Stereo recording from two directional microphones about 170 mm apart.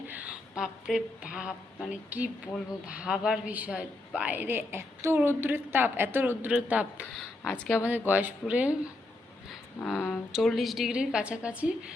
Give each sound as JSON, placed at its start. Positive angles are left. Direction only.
{"t": 0.1, "sound": "a woman's voice", "side_deg": -10}
{"t": 7.0, "sound": "speech", "side_deg": 5}
{"t": 7.9, "sound": "a woman's voice", "side_deg": -10}